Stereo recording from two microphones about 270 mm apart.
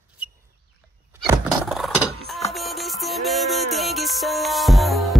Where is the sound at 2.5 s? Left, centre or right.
Centre.